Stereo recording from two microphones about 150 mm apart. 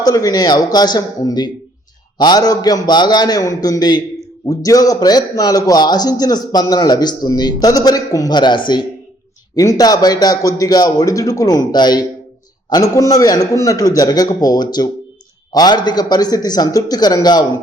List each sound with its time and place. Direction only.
0.0 s a man's voice: 25° left (ahead or behind)